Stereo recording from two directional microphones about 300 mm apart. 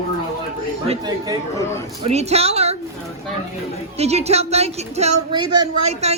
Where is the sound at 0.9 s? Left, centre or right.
Centre.